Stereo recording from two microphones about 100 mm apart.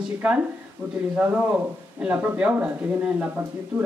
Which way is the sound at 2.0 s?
10° right (ahead or behind).